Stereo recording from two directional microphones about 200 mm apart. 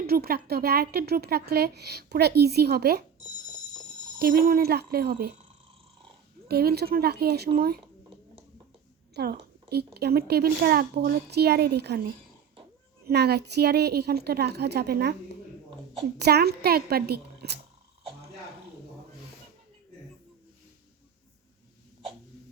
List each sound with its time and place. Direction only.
0.1 s a woman's voice: 50° right (ahead or behind)
4.2 s a woman's voice: 45° right (ahead or behind)
6.5 s a woman's voice: 50° right (ahead or behind)
9.1 s a woman's voice: 55° right (ahead or behind)
13.1 s a woman's voice: 55° right (ahead or behind)
16.1 s a woman's voice: 55° right (ahead or behind)